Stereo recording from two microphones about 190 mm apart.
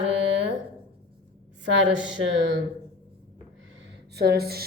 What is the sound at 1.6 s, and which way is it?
Mantra, 70° right (ahead or behind).